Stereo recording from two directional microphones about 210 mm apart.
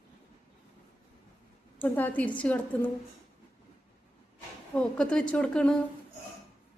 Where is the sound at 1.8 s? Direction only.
5° left (ahead or behind).